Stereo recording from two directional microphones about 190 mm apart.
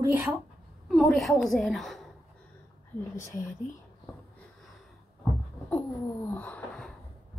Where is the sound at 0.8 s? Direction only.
Centre (ahead or behind).